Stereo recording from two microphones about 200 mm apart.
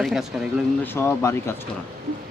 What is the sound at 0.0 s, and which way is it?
Speech, centre (ahead or behind).